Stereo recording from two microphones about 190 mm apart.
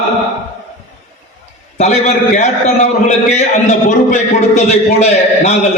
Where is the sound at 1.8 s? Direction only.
35° left (ahead or behind).